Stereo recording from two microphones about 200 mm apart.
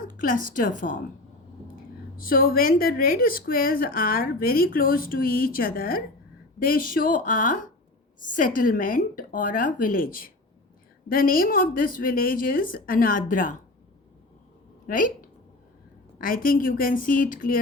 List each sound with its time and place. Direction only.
0.0 s a woman's voice: 45° left (ahead or behind)
2.1 s a woman's voice: 45° left (ahead or behind)
14.8 s speech: 40° left (ahead or behind)
16.1 s a woman's voice: 45° left (ahead or behind)